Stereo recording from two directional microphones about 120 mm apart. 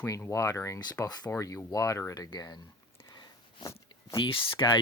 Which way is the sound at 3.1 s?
40° left (ahead or behind).